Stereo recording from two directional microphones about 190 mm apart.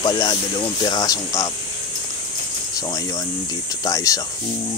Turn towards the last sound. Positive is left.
turn(degrees=20)  # may be behind; listen again after turning